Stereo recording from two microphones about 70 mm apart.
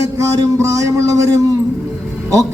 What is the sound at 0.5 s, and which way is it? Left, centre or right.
A man's voice, right.